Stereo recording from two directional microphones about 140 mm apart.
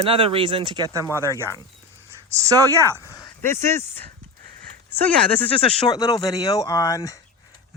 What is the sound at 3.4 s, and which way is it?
Speech, 15° left (ahead or behind).